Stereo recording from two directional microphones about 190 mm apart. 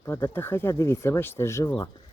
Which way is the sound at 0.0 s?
10° left (ahead or behind).